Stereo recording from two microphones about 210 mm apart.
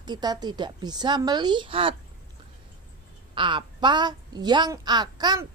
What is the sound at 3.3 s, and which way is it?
A woman's voice, 20° right (ahead or behind).